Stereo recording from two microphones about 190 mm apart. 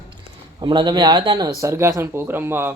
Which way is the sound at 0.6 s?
25° right (ahead or behind).